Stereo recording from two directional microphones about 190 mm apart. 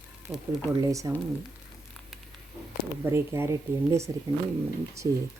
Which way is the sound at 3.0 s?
15° right (ahead or behind).